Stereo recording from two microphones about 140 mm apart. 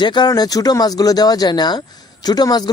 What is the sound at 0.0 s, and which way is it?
Speech, 30° left (ahead or behind).